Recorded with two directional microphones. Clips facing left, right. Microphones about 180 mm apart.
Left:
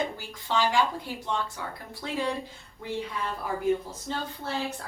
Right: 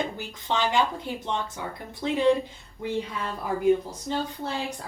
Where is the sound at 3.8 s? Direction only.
15° right (ahead or behind).